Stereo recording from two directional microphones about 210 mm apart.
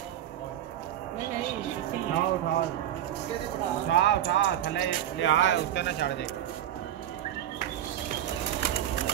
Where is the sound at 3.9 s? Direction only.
55° left (ahead or behind).